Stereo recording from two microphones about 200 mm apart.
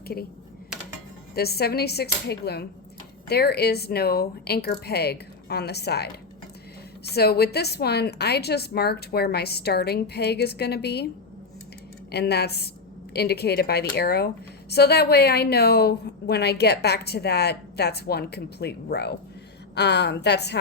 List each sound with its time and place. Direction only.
1.4 s a woman's voice: 50° left (ahead or behind)
12.1 s a woman's voice: 55° left (ahead or behind)